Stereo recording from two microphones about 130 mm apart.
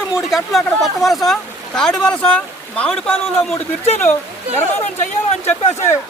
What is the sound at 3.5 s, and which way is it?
Speech, 55° left (ahead or behind).